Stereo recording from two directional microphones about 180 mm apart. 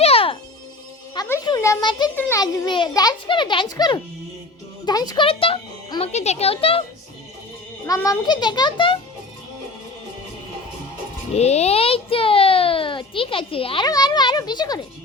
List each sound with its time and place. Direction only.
0.0 s music: 30° left (ahead or behind)
1.1 s music: 20° left (ahead or behind)
2.1 s a child's voice: 10° left (ahead or behind)
2.4 s a child's voice: 25° left (ahead or behind)
7.9 s a child's voice: 15° left (ahead or behind)
11.3 s a child's voice: 35° left (ahead or behind)